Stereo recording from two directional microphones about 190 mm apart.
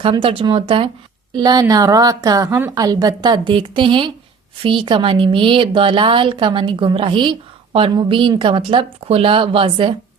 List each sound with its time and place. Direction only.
0.0 s a woman's voice: 30° right (ahead or behind)